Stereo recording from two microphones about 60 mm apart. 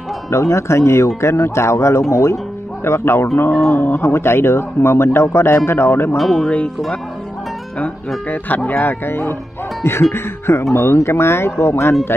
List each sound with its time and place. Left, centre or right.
0.3 s speech: left
3.3 s speech: left
6.1 s speech: centre
8.3 s speech: left
8.7 s speech: left